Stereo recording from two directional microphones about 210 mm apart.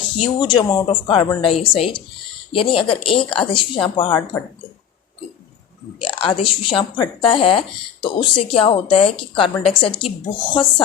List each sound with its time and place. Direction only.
0.2 s a woman's voice: 20° left (ahead or behind)
6.0 s a woman's voice: 25° left (ahead or behind)